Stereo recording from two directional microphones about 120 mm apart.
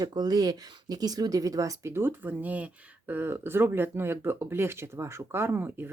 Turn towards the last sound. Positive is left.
turn(degrees=-20)  # may be behind; listen again after turning